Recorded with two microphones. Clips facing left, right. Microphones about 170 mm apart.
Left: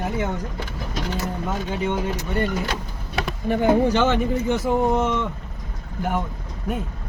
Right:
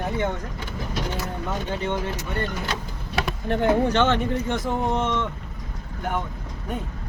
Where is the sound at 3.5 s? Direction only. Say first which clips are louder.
Left 2 dB; 5° left (ahead or behind).